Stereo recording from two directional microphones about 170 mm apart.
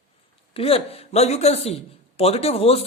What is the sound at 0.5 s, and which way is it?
A man's voice, 35° left (ahead or behind).